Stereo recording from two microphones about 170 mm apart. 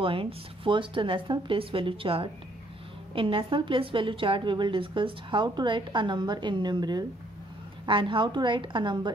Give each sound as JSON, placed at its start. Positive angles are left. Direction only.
{"t": 0.0, "sound": "a woman's voice", "side_deg": -30}